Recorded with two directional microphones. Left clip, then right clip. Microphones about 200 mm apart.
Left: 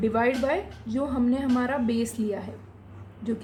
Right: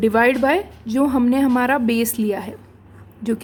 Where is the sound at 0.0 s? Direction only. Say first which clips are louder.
Right 8 dB; 50° right (ahead or behind).